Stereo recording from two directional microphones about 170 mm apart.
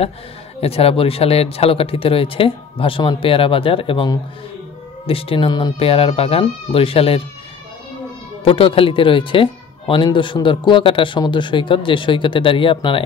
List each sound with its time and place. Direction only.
0.6 s speech: 35° left (ahead or behind)
8.5 s speech: 35° left (ahead or behind)